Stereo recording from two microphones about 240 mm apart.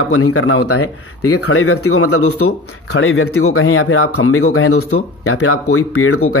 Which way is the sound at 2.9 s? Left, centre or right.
Left.